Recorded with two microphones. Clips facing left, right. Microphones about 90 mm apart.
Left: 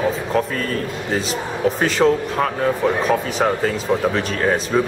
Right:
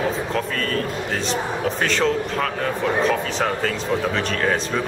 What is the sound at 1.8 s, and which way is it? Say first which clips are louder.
Speech: left 4 dB; 10° left (ahead or behind).